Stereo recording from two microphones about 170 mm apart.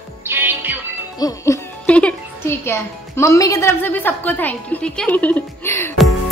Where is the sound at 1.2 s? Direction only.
20° left (ahead or behind).